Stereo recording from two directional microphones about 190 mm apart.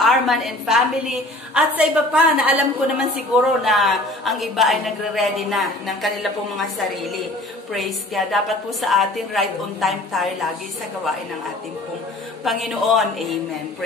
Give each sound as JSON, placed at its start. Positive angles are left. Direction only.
{"t": 0.0, "sound": "a woman's voice", "side_deg": 0}
{"t": 7.7, "sound": "a woman's voice", "side_deg": 0}
{"t": 12.4, "sound": "a woman's voice", "side_deg": 0}